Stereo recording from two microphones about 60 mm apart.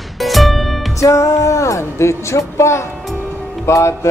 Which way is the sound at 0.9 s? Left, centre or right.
Left.